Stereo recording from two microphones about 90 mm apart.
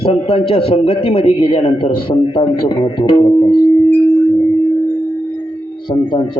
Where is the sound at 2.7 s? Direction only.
65° left (ahead or behind).